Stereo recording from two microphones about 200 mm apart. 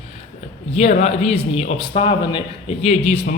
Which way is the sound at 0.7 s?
30° left (ahead or behind).